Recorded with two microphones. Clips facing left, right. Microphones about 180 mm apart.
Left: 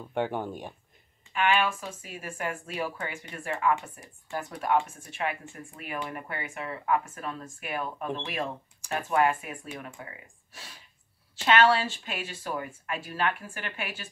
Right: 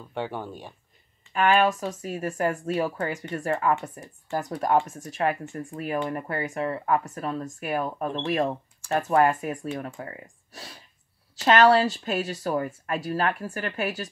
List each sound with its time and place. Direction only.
0.1 s speech: 15° left (ahead or behind)
1.3 s speech: 40° right (ahead or behind)